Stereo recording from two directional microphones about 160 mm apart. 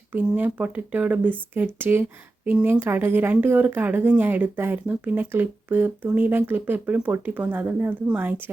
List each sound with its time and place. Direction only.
0.1 s a woman's voice: 10° right (ahead or behind)